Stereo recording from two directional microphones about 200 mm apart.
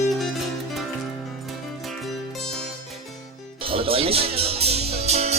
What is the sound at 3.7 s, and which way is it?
Music, 25° right (ahead or behind).